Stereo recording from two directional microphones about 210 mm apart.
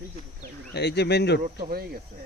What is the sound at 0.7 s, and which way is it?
Speech, 50° left (ahead or behind).